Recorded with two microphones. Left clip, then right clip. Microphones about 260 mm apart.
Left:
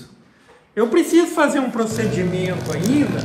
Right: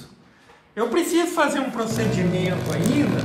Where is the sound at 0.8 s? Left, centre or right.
Centre.